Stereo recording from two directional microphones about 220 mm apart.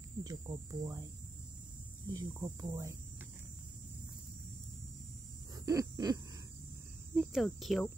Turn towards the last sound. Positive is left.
turn(degrees=0)  # may be behind; listen again after turning